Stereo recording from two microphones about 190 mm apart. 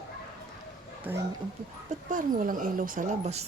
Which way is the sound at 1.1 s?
10° right (ahead or behind).